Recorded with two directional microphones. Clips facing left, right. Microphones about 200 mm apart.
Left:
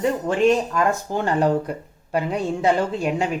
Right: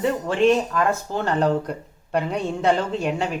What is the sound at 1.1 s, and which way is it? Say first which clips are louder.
Speech: left 2 dB; 15° left (ahead or behind).